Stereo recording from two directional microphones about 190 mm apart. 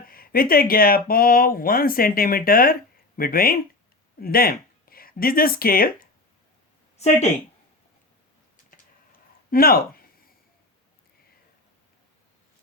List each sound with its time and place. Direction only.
0.1 s speech: 50° left (ahead or behind)
6.9 s speech: 35° left (ahead or behind)
9.5 s speech: 50° left (ahead or behind)